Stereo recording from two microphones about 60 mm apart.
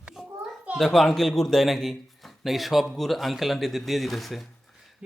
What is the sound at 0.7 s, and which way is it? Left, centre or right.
A man's voice, centre.